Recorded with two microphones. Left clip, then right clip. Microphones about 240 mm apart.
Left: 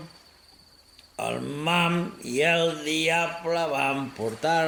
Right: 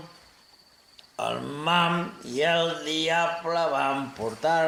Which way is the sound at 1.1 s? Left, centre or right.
Left.